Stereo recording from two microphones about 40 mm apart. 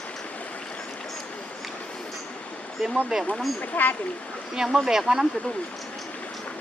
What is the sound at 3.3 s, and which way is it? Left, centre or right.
Speech, centre.